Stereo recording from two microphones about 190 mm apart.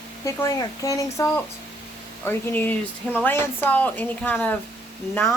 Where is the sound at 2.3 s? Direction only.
10° left (ahead or behind).